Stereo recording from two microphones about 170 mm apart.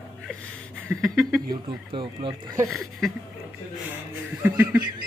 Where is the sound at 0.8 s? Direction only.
Centre (ahead or behind).